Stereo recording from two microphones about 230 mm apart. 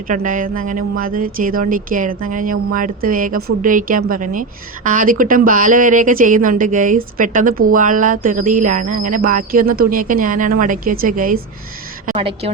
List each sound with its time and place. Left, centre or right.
0.1 s speech: right
12.1 s a woman's voice: right